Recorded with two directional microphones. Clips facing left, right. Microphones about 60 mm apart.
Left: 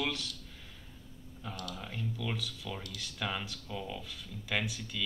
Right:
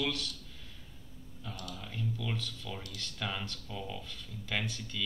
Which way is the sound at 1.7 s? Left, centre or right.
Centre.